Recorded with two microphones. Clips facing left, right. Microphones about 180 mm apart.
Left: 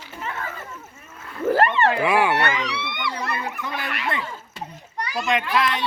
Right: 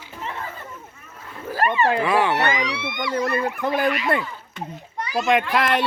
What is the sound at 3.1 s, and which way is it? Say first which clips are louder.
Speech: right 6 dB; 50° right (ahead or behind).